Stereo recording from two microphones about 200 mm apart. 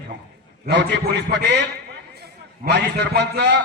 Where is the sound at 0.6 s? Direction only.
60° right (ahead or behind).